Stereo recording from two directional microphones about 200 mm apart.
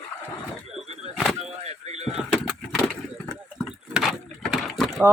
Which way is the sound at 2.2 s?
Centre (ahead or behind).